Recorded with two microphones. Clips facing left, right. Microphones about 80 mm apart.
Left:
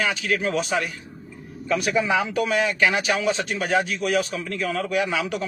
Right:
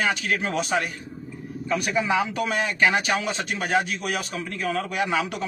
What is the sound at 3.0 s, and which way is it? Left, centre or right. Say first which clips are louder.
A man's voice: left 3 dB; right.